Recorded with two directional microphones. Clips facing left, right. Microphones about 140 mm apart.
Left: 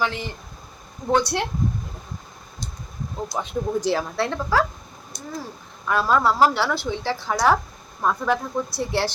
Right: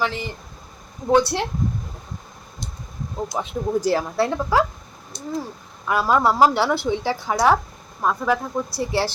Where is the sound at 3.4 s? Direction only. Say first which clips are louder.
Right 2 dB; 5° right (ahead or behind).